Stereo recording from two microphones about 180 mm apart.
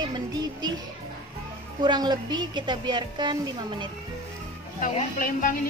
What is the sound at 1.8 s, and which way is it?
A woman's voice, 25° right (ahead or behind).